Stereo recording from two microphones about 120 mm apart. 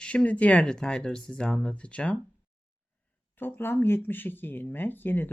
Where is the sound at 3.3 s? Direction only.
15° left (ahead or behind).